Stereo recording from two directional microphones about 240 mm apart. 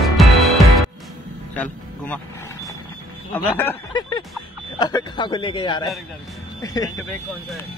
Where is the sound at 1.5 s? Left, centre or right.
Centre.